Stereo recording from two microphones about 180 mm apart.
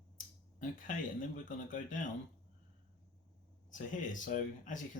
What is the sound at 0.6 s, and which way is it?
Speech, 45° left (ahead or behind).